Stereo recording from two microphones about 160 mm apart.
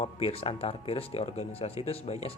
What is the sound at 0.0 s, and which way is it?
Speech, 40° left (ahead or behind).